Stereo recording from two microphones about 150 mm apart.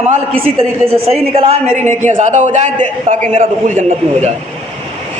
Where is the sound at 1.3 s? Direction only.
50° right (ahead or behind).